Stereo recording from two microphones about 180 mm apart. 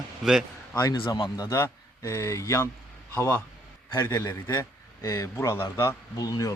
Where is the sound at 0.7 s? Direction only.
20° left (ahead or behind).